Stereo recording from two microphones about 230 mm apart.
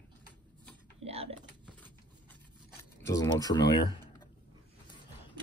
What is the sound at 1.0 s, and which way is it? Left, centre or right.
Typing, right.